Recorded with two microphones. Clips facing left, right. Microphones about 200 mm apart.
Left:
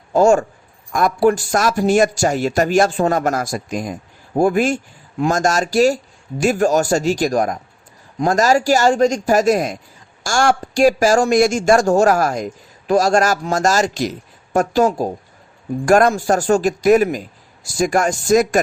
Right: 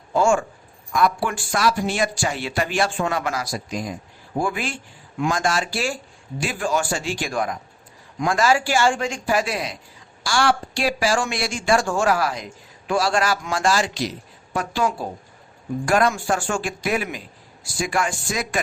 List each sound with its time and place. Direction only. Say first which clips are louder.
0.1 s speech: left 6 dB; 40° left (ahead or behind)